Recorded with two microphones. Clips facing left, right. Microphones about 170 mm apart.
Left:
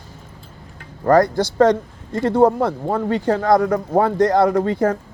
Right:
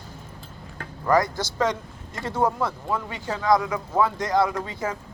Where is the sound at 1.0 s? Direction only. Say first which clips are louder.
Left 7 dB; 60° left (ahead or behind).